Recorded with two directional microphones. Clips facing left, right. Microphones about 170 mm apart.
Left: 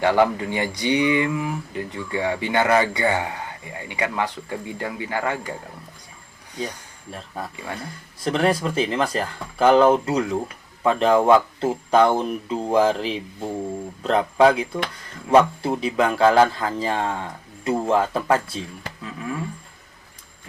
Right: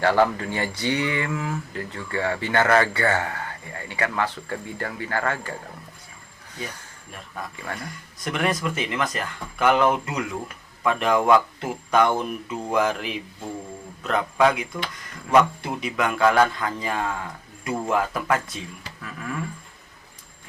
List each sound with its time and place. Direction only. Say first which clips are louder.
0.0 s speech: left 1 dB; 15° left (ahead or behind)
8.2 s a man's voice: left 4 dB; 30° left (ahead or behind)
19.0 s roaring cats: left 3 dB; 20° left (ahead or behind)